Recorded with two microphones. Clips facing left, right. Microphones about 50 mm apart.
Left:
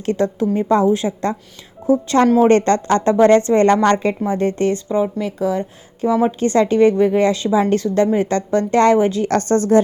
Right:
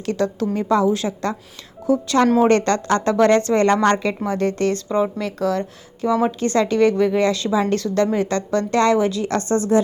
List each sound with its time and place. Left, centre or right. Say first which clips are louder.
0.0 s a woman's voice: left 3 dB; left
9.3 s speech: left 4 dB; left